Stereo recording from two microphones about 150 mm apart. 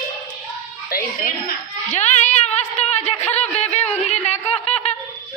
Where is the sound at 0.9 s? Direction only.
75° left (ahead or behind).